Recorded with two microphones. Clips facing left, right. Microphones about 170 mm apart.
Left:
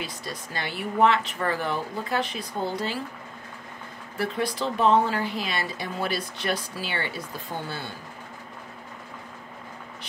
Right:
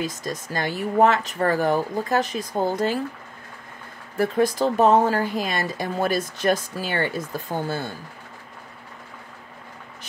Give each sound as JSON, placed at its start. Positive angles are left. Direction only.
{"t": 0.0, "sound": "speech", "side_deg": -45}
{"t": 4.2, "sound": "speech", "side_deg": -45}